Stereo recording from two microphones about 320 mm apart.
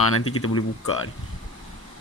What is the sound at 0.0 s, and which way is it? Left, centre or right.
Speech, left.